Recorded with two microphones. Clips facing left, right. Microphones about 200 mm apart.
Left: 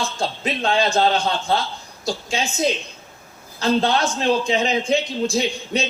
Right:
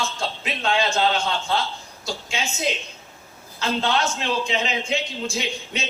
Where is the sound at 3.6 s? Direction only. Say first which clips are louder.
Left 4 dB; 35° left (ahead or behind).